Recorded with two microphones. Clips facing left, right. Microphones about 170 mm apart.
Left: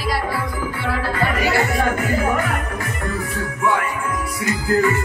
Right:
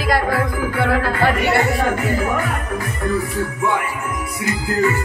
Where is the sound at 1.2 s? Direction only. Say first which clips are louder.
Right 1 dB; 60° right (ahead or behind).